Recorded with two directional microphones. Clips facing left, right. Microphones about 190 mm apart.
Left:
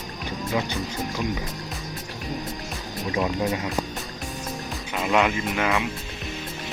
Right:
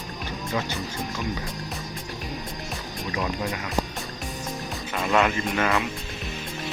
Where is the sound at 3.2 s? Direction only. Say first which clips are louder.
Left 4 dB; 25° left (ahead or behind).